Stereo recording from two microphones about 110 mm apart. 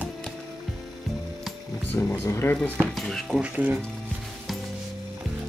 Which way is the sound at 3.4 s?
15° right (ahead or behind).